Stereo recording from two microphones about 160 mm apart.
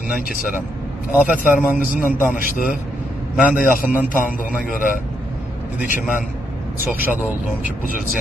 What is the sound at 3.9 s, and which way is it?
A man's voice, 55° left (ahead or behind).